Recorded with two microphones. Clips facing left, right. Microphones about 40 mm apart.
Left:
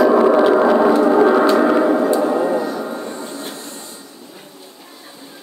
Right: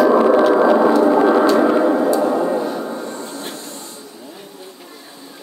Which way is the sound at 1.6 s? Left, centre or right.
Centre.